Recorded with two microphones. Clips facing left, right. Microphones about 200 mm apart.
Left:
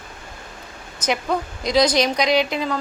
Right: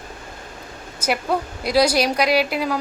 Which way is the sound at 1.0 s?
10° right (ahead or behind).